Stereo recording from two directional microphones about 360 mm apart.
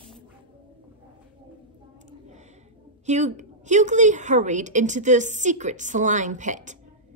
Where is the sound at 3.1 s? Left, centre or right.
Centre.